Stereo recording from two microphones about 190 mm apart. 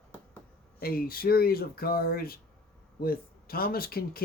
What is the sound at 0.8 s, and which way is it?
Speech, 50° left (ahead or behind).